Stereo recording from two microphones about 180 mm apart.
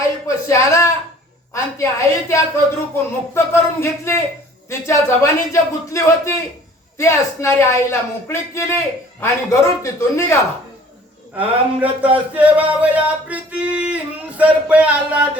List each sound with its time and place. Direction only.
0.0 s a sound: 15° left (ahead or behind)
1.5 s a woman's voice: 15° left (ahead or behind)
11.3 s singing: 10° right (ahead or behind)